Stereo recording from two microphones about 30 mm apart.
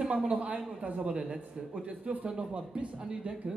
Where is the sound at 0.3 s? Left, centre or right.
Right.